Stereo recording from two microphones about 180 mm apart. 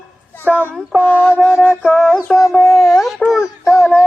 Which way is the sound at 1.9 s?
5° right (ahead or behind).